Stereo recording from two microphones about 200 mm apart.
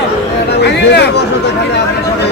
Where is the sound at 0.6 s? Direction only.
60° left (ahead or behind).